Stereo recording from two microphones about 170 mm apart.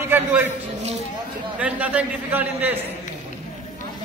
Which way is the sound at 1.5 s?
10° right (ahead or behind).